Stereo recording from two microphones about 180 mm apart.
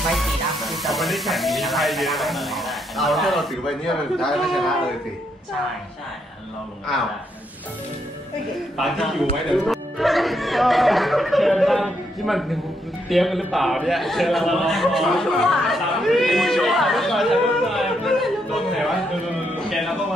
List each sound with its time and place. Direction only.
0.1 s speech: centre (ahead or behind)
8.7 s a man's voice: centre (ahead or behind)
19.7 s music: centre (ahead or behind)